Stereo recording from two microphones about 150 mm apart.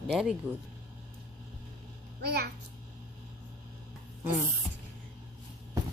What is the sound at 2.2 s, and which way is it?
Speech, 90° right.